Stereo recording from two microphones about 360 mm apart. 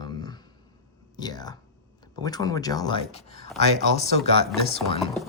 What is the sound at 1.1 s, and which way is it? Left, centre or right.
Speech, centre.